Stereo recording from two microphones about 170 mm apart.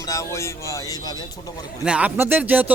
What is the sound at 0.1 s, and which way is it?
Speech, 20° left (ahead or behind).